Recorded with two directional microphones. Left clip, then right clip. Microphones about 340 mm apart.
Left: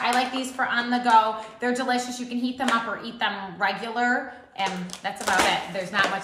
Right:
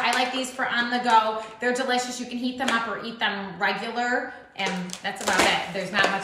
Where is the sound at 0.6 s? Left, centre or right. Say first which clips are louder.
Left 1 dB; centre.